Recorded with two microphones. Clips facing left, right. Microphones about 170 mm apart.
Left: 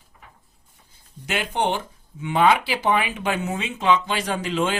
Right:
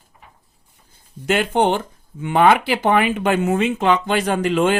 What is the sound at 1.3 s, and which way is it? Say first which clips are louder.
Speech: right 7 dB; 55° right (ahead or behind).